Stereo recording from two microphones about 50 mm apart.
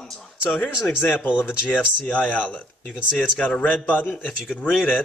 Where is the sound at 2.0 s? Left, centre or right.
Left.